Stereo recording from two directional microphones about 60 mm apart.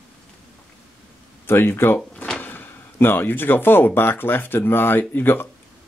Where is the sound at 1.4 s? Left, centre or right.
Left.